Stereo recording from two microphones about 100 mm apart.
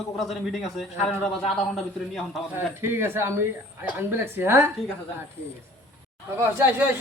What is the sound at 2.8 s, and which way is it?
A woman's voice, 25° right (ahead or behind).